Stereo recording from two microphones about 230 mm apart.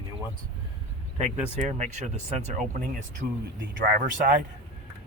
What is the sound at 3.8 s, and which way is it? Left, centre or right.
Speech, right.